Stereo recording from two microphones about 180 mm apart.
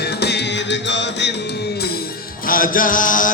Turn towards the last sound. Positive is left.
turn(degrees=50)  # may be behind; listen again after turning